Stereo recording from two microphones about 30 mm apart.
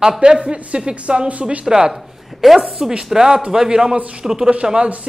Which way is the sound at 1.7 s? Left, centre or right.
Right.